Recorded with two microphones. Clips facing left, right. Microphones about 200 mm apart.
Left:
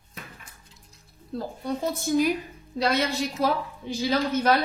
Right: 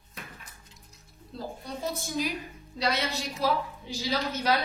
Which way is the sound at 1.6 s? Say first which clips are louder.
Left 7 dB; 50° left (ahead or behind).